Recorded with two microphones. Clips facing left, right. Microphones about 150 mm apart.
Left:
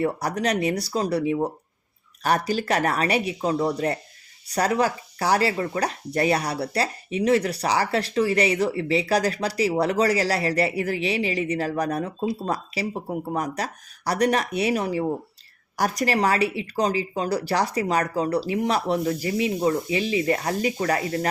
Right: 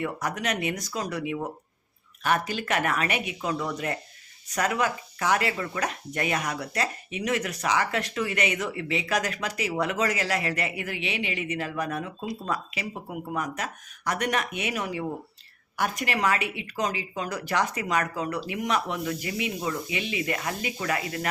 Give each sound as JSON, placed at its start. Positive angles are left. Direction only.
{"t": 0.0, "sound": "speech", "side_deg": 35}